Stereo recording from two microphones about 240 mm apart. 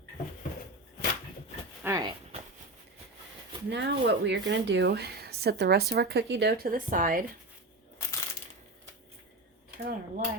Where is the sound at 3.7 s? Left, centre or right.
Right.